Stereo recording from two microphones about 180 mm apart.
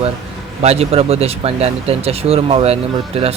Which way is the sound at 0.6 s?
35° right (ahead or behind).